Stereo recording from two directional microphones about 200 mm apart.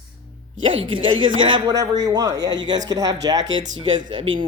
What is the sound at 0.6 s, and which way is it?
Speech, 25° right (ahead or behind).